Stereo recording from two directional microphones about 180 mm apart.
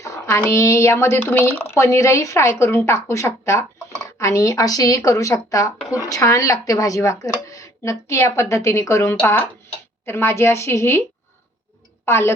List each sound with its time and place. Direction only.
0.0 s speech: 15° left (ahead or behind)
12.0 s a woman's voice: 15° left (ahead or behind)